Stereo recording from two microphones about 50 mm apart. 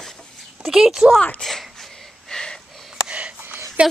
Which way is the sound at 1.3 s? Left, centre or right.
Centre.